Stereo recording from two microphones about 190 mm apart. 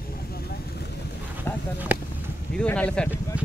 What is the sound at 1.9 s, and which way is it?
Basketball bounce, 10° right (ahead or behind).